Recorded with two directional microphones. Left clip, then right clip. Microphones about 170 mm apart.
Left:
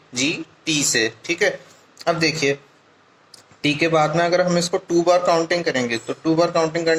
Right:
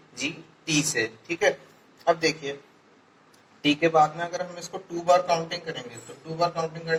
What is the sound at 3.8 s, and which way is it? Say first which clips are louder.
Speech: left 4 dB; 25° left (ahead or behind).